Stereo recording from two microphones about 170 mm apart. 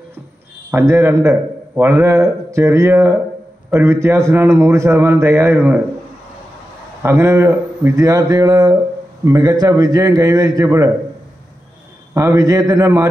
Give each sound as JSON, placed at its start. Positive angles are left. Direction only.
{"t": 0.7, "sound": "a man's voice", "side_deg": -15}
{"t": 7.0, "sound": "speech", "side_deg": -15}
{"t": 12.1, "sound": "speech", "side_deg": -15}